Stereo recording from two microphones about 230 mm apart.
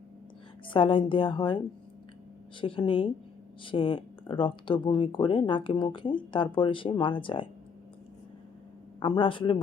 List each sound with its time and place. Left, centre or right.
0.7 s speech: left
2.6 s speech: left
9.0 s speech: centre